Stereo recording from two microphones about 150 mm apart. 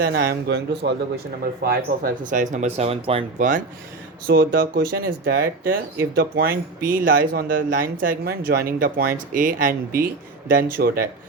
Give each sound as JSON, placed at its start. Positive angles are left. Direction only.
{"t": 0.0, "sound": "a man's voice", "side_deg": -90}
{"t": 4.3, "sound": "speech", "side_deg": -75}